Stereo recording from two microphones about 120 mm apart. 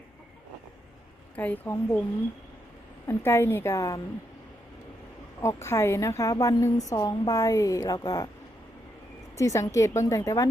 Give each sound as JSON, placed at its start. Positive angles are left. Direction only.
{"t": 1.4, "sound": "a woman's voice", "side_deg": 15}
{"t": 3.1, "sound": "a woman's voice", "side_deg": 20}
{"t": 5.4, "sound": "a woman's voice", "side_deg": 25}
{"t": 9.4, "sound": "a woman's voice", "side_deg": 25}